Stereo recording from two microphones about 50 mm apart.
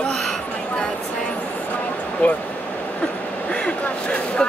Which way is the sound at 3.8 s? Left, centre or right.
Left.